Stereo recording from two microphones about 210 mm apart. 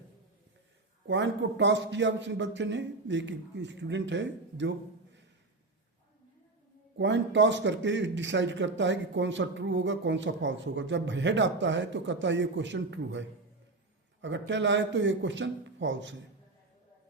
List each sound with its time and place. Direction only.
1.0 s a man's voice: 60° right (ahead or behind)
7.0 s a man's voice: 60° right (ahead or behind)